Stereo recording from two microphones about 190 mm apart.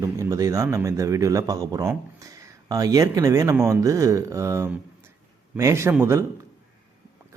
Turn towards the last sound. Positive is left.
turn(degrees=-15)  # may be behind; listen again after turning